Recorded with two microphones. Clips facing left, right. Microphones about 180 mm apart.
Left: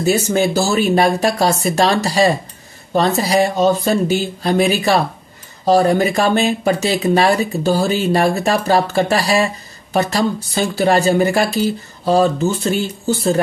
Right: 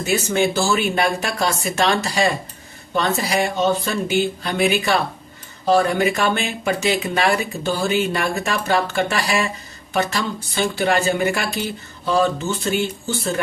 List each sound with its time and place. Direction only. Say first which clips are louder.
0.0 s speech: left 4 dB; 40° left (ahead or behind)